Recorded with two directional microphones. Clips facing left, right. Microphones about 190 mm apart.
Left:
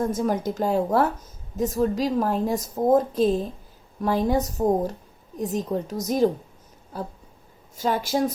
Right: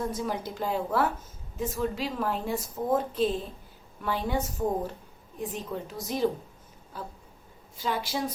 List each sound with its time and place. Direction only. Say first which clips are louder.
0.0 s a woman's voice: left 7 dB; 45° left (ahead or behind)